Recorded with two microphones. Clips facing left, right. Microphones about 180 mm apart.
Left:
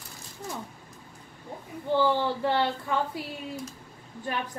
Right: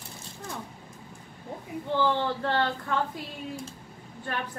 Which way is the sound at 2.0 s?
10° left (ahead or behind).